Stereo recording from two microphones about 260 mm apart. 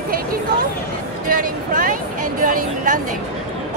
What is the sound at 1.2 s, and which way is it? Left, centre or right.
Speech, right.